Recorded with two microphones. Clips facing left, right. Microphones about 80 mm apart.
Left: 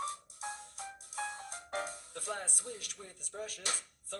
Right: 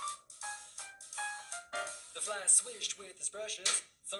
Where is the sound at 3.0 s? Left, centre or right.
Left.